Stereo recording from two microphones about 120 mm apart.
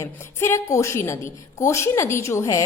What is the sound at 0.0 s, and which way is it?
A woman's voice, 25° left (ahead or behind).